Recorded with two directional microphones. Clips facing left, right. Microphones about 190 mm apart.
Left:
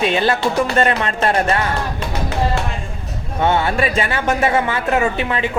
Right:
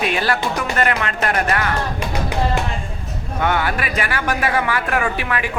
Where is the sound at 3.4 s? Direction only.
25° left (ahead or behind).